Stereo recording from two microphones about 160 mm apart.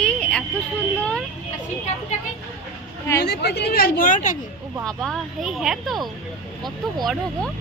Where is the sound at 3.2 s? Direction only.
90° left; by 4.3 s 55° left (ahead or behind).